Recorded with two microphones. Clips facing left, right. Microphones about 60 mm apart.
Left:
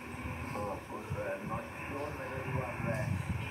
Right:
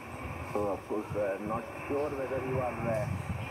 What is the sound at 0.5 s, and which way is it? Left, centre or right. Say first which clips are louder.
Speech: right 7 dB; right.